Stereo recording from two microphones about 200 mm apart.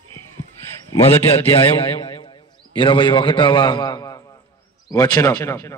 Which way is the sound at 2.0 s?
25° left (ahead or behind).